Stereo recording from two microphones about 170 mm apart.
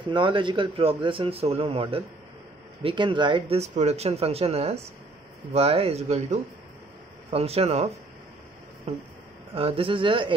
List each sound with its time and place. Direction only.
0.0 s speech: 30° right (ahead or behind)